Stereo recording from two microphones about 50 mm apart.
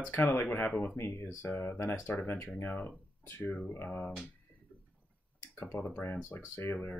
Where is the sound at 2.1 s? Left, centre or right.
Left.